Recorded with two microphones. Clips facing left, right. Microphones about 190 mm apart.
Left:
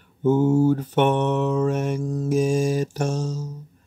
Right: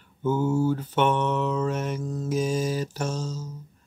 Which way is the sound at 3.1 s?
65° left (ahead or behind).